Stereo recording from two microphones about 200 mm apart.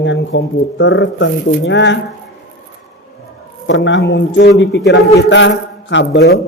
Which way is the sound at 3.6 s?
65° left (ahead or behind).